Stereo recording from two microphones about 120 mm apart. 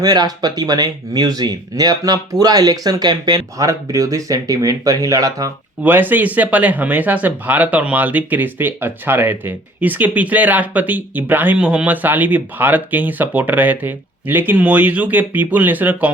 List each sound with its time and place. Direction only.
0.0 s speech: 35° right (ahead or behind)
5.8 s speech: 15° right (ahead or behind)